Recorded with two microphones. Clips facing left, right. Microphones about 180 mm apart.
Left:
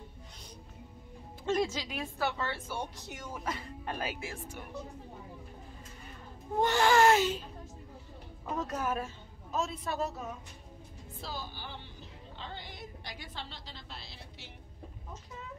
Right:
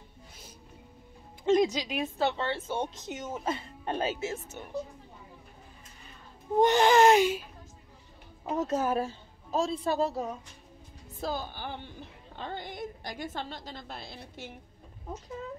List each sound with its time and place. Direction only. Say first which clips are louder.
1.4 s a woman's voice: right 6 dB; 15° right (ahead or behind)
6.5 s a woman's voice: right 4 dB; 20° right (ahead or behind)
8.5 s a woman's voice: right 5 dB; 25° right (ahead or behind)
11.1 s a woman's voice: right 8 dB; 50° right (ahead or behind)